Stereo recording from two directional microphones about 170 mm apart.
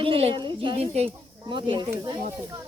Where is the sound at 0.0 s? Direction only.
35° right (ahead or behind).